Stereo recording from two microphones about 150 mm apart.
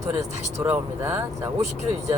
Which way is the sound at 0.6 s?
15° right (ahead or behind).